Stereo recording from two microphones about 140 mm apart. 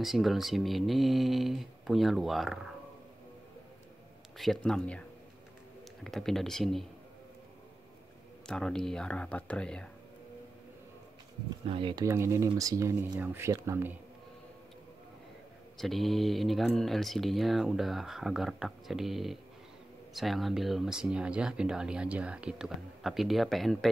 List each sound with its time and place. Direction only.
0.0 s speech: centre (ahead or behind)
4.4 s speech: centre (ahead or behind)
6.0 s speech: centre (ahead or behind)
8.5 s speech: 5° left (ahead or behind)
11.6 s speech: 40° right (ahead or behind)
12.0 s speech: 20° right (ahead or behind)
13.1 s speech: 15° right (ahead or behind)
15.8 s speech: centre (ahead or behind)